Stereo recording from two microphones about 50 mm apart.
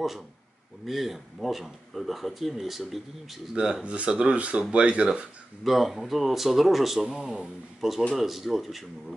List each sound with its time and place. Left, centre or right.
0.8 s speech: centre
3.5 s speech: centre
5.6 s speech: centre